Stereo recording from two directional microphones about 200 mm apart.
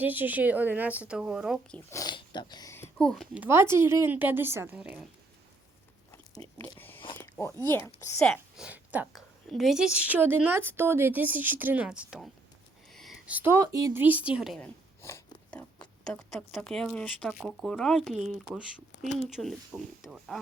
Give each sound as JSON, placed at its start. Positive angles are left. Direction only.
{"t": 0.0, "sound": "a woman's voice", "side_deg": -10}
{"t": 1.9, "sound": "a woman's voice", "side_deg": 20}
{"t": 6.4, "sound": "a sound", "side_deg": -30}
{"t": 6.7, "sound": "biting", "side_deg": 10}
{"t": 7.7, "sound": "a woman's voice", "side_deg": 15}
{"t": 8.3, "sound": "a woman's voice", "side_deg": -5}
{"t": 15.0, "sound": "a sound", "side_deg": 15}
{"t": 16.0, "sound": "speech", "side_deg": 5}